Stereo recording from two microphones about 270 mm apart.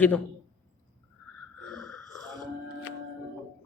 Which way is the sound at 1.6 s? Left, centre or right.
Centre.